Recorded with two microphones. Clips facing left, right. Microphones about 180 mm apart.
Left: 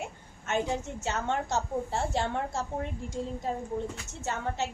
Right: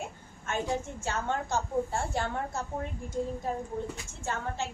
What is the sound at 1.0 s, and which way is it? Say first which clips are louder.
A woman's voice: left 4 dB; 20° left (ahead or behind).